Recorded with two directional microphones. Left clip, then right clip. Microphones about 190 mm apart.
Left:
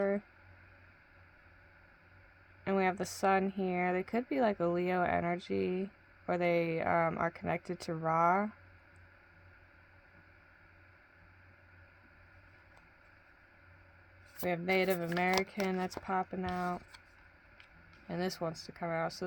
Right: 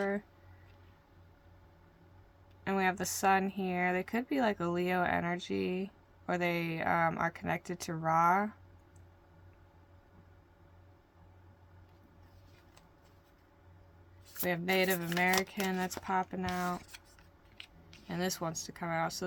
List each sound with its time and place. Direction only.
2.6 s speech: 50° left (ahead or behind)
14.4 s speech: 55° left (ahead or behind)
18.1 s speech: 50° left (ahead or behind)